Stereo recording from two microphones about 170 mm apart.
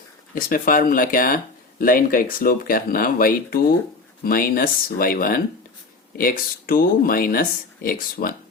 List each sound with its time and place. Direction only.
0.3 s speech: 55° left (ahead or behind)